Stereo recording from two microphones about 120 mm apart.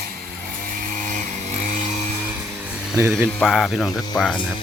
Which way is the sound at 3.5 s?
5° left (ahead or behind).